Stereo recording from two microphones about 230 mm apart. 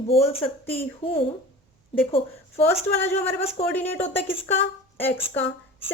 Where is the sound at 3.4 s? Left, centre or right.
Left.